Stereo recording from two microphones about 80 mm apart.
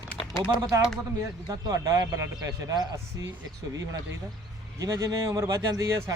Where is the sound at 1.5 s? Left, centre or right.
Right.